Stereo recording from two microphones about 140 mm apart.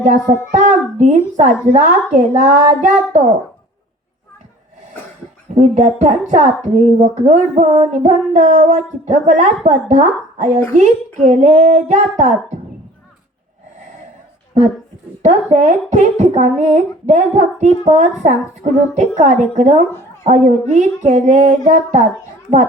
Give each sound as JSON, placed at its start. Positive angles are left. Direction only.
{"t": 0.0, "sound": "speech", "side_deg": -60}
{"t": 5.5, "sound": "speech", "side_deg": -55}
{"t": 15.2, "sound": "speech", "side_deg": -60}